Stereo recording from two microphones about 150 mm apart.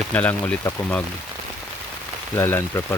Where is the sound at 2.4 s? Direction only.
15° left (ahead or behind).